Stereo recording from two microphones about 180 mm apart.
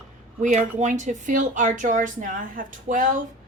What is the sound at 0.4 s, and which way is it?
Speech, 45° right (ahead or behind).